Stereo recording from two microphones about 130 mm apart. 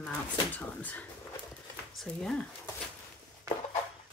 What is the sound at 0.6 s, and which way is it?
Speech, 10° left (ahead or behind).